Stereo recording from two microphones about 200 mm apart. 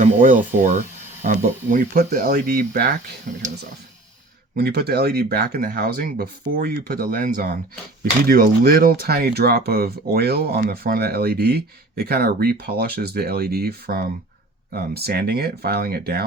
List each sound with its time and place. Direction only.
0.0 s speech: 40° right (ahead or behind)
4.5 s speech: 55° right (ahead or behind)